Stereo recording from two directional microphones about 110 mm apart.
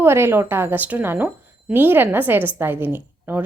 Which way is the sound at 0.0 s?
20° right (ahead or behind).